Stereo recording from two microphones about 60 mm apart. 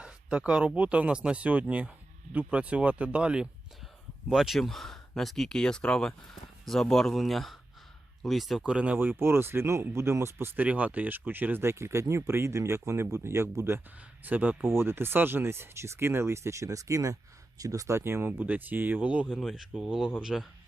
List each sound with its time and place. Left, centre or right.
0.0 s a sound: centre
0.8 s speech: right
4.3 s speech: centre
8.6 s speech: right
9.0 s speech: right
10.7 s speech: right
11.6 s speech: right
14.3 s speech: right
14.7 s speech: right
18.3 s speech: right
19.4 s speech: centre